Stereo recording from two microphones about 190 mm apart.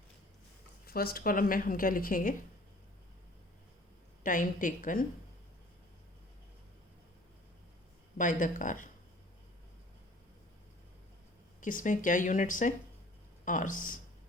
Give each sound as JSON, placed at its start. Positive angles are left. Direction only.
{"t": 0.9, "sound": "a woman's voice", "side_deg": 50}
{"t": 4.2, "sound": "a woman's voice", "side_deg": 45}
{"t": 8.2, "sound": "a woman's voice", "side_deg": 45}
{"t": 11.6, "sound": "a woman's voice", "side_deg": 45}